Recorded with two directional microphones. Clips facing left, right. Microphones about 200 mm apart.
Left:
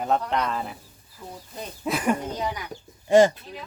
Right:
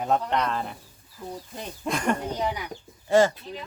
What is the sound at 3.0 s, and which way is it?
Speech, 20° left (ahead or behind).